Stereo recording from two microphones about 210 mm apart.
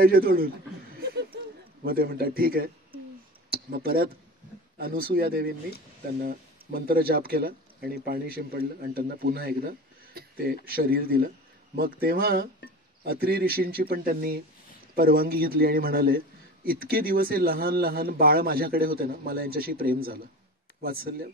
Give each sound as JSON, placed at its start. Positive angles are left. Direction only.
{"t": 0.0, "sound": "speech", "side_deg": -45}
{"t": 1.0, "sound": "a sound", "side_deg": -55}
{"t": 1.9, "sound": "speech", "side_deg": -45}